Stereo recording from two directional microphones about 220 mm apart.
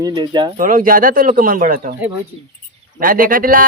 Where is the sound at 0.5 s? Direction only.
40° right (ahead or behind).